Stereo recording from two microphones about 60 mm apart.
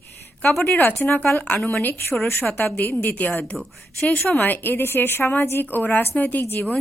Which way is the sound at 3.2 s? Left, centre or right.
Left.